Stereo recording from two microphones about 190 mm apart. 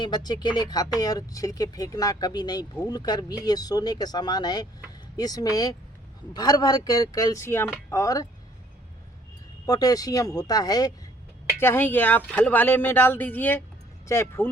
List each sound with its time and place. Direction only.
0.0 s speech: 20° left (ahead or behind)
9.6 s speech: 20° left (ahead or behind)